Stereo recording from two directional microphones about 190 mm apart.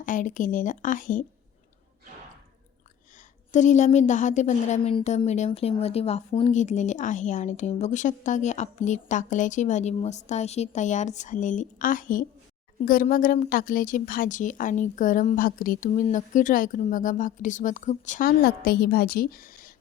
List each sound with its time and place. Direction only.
0.0 s a woman's voice: 45° left (ahead or behind)
3.2 s a woman's voice: 40° left (ahead or behind)